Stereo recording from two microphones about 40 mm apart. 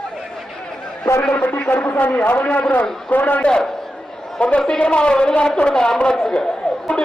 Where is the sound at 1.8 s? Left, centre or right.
Left.